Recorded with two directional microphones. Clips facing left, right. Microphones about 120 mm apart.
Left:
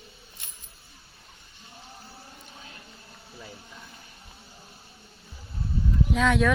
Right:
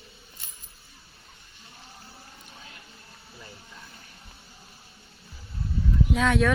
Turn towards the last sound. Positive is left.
turn(degrees=0)  # may be behind; listen again after turning